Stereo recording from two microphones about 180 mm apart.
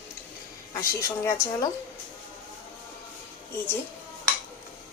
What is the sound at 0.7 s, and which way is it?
Speech, 15° left (ahead or behind).